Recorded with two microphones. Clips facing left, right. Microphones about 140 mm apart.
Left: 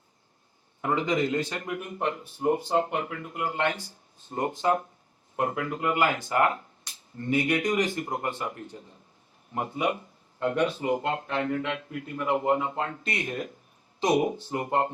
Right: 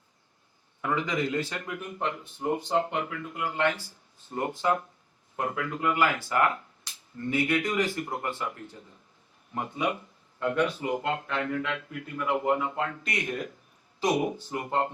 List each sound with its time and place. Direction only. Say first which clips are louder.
0.8 s speech: left 3 dB; 25° left (ahead or behind)